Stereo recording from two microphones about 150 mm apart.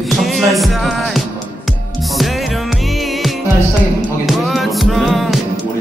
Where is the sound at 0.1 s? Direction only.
Centre (ahead or behind).